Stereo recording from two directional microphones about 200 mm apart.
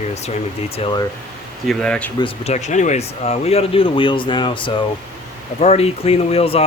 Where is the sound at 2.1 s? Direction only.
30° left (ahead or behind).